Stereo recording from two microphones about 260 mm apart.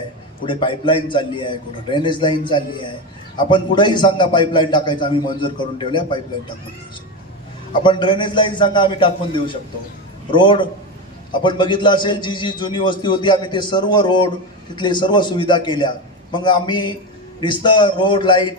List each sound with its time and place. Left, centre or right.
0.4 s a man's voice: centre
7.7 s a man's voice: centre